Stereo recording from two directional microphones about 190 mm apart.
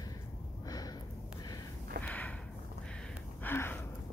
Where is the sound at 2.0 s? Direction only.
10° left (ahead or behind).